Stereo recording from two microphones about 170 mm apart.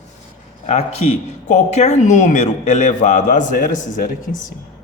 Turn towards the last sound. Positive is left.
turn(degrees=55)  # may be behind; listen again after turning